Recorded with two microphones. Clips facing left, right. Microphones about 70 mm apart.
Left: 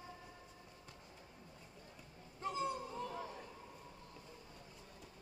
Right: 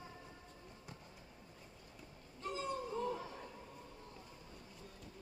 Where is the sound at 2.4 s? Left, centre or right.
Left.